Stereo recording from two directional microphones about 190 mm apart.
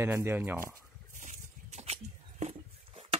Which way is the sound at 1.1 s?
40° right (ahead or behind).